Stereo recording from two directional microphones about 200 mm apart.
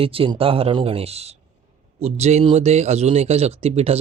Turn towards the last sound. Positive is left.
turn(degrees=-30)  # may be behind; listen again after turning